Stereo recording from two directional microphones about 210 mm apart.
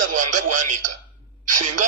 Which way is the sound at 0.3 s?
35° right (ahead or behind).